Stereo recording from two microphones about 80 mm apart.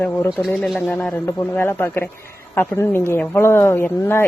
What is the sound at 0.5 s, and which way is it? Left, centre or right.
Speech, centre.